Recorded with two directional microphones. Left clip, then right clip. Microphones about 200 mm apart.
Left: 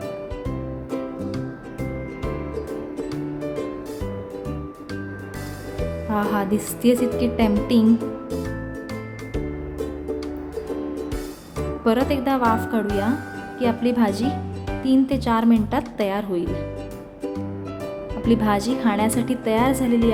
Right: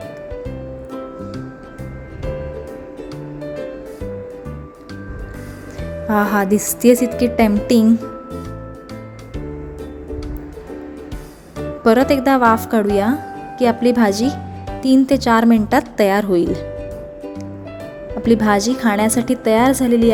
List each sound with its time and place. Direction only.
6.1 s speech: 25° right (ahead or behind)
11.8 s speech: 25° right (ahead or behind)
18.3 s speech: 25° right (ahead or behind)